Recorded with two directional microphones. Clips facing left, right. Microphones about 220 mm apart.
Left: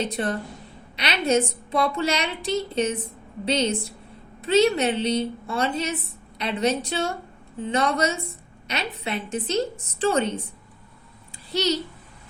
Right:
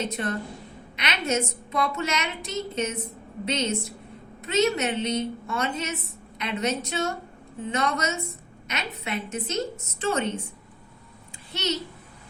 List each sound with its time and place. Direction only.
0.0 s a woman's voice: 35° left (ahead or behind)
11.5 s a woman's voice: 35° left (ahead or behind)